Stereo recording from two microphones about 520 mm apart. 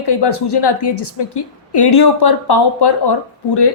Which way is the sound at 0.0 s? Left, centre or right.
Left.